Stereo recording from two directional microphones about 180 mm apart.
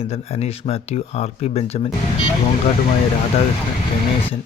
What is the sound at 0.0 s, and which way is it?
Speech, 35° left (ahead or behind).